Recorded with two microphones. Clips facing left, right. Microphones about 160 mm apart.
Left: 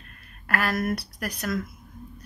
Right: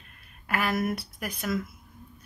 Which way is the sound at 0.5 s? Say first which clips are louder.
Left 1 dB; 15° right (ahead or behind).